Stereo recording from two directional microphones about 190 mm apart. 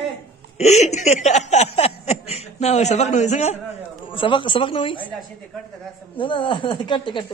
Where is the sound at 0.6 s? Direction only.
35° left (ahead or behind).